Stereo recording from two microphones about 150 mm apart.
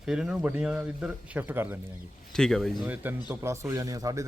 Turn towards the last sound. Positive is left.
turn(degrees=-25)  # may be behind; listen again after turning